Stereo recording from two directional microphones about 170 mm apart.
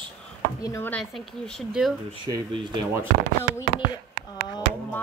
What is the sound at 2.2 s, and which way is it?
Speech, 25° right (ahead or behind).